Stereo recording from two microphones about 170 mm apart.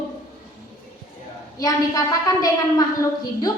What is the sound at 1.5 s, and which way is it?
A woman's voice, 20° left (ahead or behind).